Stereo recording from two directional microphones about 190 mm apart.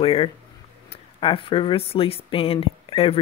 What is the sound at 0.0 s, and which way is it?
Speech, 30° left (ahead or behind).